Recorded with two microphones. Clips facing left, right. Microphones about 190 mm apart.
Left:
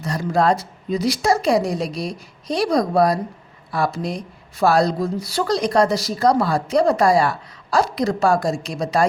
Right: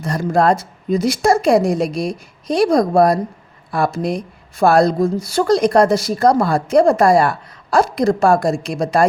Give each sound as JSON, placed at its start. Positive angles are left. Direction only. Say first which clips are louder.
{"t": 0.0, "sound": "a woman's voice", "louder": "right 3 dB", "side_deg": -50}